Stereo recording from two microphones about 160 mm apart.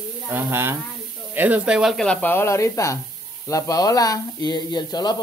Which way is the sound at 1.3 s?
10° right (ahead or behind).